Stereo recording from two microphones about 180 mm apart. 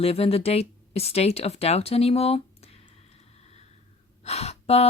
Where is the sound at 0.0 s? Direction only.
35° left (ahead or behind).